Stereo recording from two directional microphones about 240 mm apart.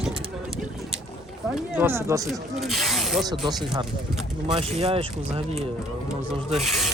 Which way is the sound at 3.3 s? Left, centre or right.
Centre.